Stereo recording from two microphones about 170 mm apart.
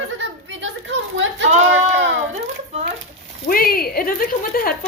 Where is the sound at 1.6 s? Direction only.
90° right.